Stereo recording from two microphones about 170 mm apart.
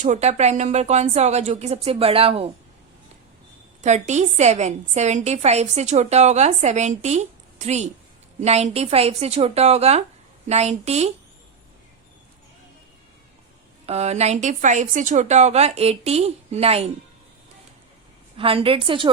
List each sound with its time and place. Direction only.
0.0 s a woman's voice: 45° right (ahead or behind)
3.8 s a woman's voice: 45° right (ahead or behind)
13.8 s a woman's voice: 40° right (ahead or behind)
18.3 s a woman's voice: 35° right (ahead or behind)